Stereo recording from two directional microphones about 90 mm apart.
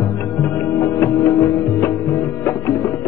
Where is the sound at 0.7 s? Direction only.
35° left (ahead or behind).